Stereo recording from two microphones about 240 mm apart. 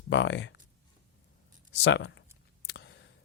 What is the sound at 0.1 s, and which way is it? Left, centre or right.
Speech, left.